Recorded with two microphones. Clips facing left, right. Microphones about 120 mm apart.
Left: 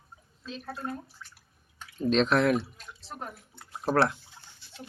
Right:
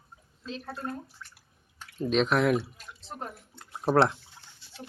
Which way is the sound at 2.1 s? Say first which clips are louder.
Left 1 dB; 10° right (ahead or behind).